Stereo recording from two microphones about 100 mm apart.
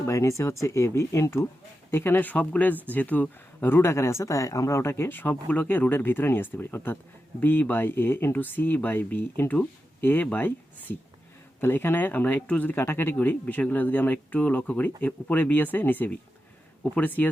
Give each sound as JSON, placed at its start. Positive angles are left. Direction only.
{"t": 0.0, "sound": "speech", "side_deg": 30}